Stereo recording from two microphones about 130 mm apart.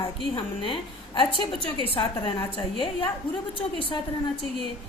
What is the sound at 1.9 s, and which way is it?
A woman's voice, 40° left (ahead or behind).